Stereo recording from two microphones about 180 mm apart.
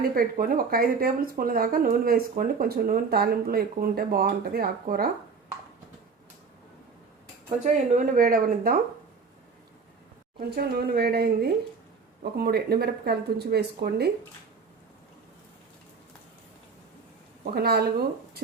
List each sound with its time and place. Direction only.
0.0 s speech: 55° right (ahead or behind)
7.6 s speech: 45° right (ahead or behind)
10.5 s speech: 60° right (ahead or behind)
17.4 s speech: 60° right (ahead or behind)